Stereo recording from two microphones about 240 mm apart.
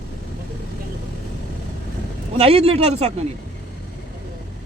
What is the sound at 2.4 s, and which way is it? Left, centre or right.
Speech, right.